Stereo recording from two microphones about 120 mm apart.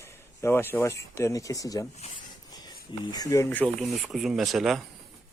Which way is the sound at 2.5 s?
35° left (ahead or behind).